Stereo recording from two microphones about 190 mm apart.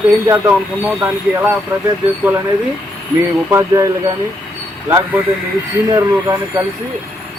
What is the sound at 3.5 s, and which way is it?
Speech, 15° right (ahead or behind).